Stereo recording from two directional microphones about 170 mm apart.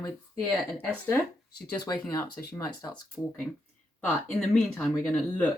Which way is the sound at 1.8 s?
20° left (ahead or behind).